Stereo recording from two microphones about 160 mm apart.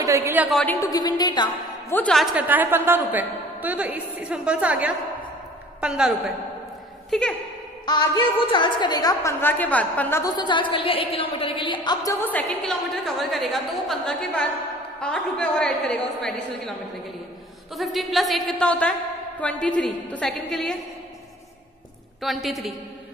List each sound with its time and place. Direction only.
0.0 s a woman's voice: 15° right (ahead or behind)
0.5 s a woman's voice: 5° left (ahead or behind)
0.7 s a woman's voice: 20° left (ahead or behind)
1.9 s a woman's voice: 10° left (ahead or behind)
2.1 s a woman's voice: 10° right (ahead or behind); by 7.3 s 5° left (ahead or behind)
7.8 s a woman's voice: 25° left (ahead or behind); by 10.2 s 10° left (ahead or behind)
10.2 s a woman's voice: 30° left (ahead or behind); by 16.3 s 5° left (ahead or behind)
17.7 s a woman's voice: centre (ahead or behind)
22.2 s a woman's voice: centre (ahead or behind)